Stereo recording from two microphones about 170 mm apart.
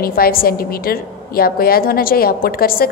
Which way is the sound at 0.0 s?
60° left (ahead or behind).